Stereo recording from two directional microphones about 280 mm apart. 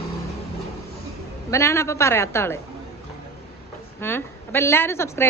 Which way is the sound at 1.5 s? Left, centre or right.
Centre.